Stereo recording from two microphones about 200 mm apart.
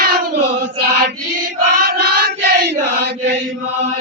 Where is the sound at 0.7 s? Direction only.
50° right (ahead or behind).